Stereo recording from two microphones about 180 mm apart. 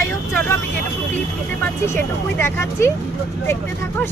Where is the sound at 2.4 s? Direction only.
15° left (ahead or behind).